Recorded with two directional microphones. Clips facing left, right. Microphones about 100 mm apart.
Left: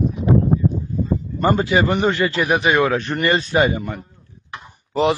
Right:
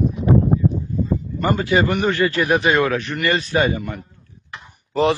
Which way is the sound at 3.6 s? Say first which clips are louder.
Left 1 dB; 15° left (ahead or behind).